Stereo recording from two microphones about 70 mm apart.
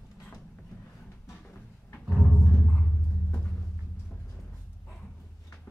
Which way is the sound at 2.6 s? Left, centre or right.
Centre.